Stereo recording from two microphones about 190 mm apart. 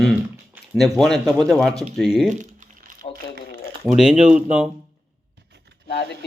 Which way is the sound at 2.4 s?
40° right (ahead or behind).